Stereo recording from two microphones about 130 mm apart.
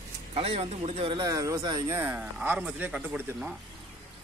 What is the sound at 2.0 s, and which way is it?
A man's voice, 15° right (ahead or behind).